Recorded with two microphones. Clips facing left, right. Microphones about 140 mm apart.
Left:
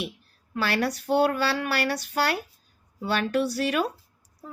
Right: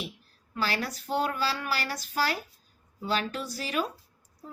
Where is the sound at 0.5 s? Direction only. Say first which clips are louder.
Left 5 dB; 65° left (ahead or behind).